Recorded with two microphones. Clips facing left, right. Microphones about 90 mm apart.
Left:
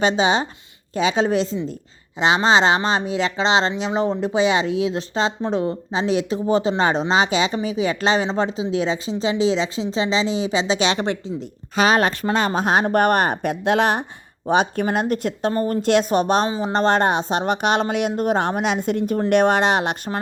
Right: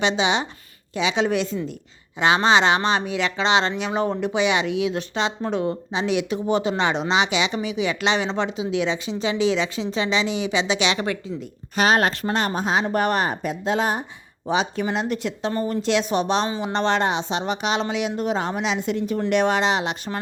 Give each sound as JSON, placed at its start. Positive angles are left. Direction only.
{"t": 0.0, "sound": "speech", "side_deg": 40}
{"t": 12.2, "sound": "speech", "side_deg": 55}
{"t": 14.5, "sound": "speech", "side_deg": 50}
{"t": 16.5, "sound": "speech", "side_deg": 35}